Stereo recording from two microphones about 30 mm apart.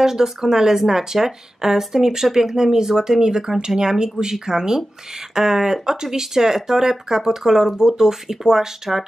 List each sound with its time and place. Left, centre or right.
0.0 s speech: centre